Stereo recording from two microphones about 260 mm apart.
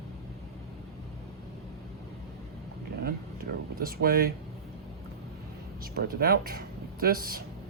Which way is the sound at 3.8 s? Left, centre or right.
Right.